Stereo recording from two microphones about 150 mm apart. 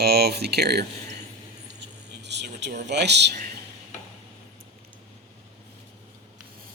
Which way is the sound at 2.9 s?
90° right.